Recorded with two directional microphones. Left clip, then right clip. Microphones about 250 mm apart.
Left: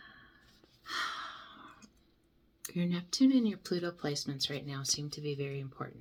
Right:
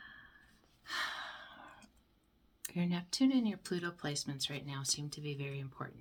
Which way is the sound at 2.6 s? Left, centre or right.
Centre.